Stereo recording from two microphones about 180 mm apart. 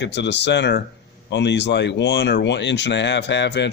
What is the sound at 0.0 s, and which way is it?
Speech, 75° left (ahead or behind).